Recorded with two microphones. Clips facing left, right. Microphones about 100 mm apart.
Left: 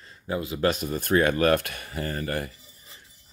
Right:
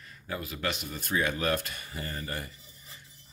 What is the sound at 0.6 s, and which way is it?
Speech, 40° left (ahead or behind).